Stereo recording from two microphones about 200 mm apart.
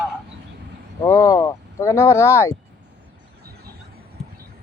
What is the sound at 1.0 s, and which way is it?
Speech, 15° left (ahead or behind).